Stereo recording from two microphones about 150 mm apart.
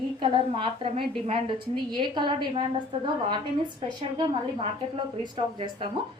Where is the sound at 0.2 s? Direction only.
35° right (ahead or behind).